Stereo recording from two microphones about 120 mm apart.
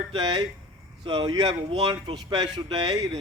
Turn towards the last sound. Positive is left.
turn(degrees=-35)  # may be behind; listen again after turning